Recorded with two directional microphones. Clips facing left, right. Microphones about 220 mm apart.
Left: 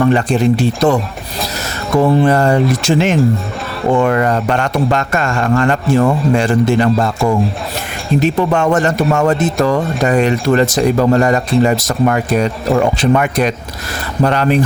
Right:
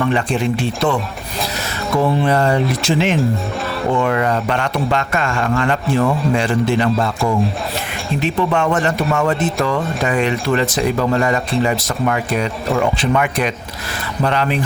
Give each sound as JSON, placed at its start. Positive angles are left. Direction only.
{"t": 0.0, "sound": "speech", "side_deg": 40}
{"t": 2.2, "sound": "a man's voice", "side_deg": 45}